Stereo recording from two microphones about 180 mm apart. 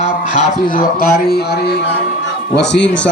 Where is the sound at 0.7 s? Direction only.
55° left (ahead or behind).